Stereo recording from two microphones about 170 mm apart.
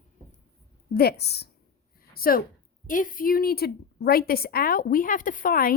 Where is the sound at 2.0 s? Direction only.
60° left (ahead or behind).